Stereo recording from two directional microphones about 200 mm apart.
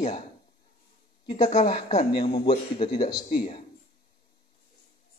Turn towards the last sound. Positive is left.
turn(degrees=30)  # may be behind; listen again after turning